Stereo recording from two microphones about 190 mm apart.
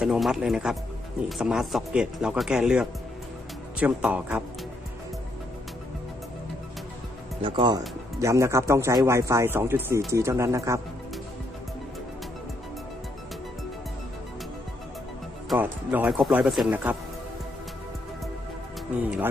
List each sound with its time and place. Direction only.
0.0 s speech: centre (ahead or behind)
7.4 s speech: 25° right (ahead or behind)
15.4 s speech: 10° right (ahead or behind)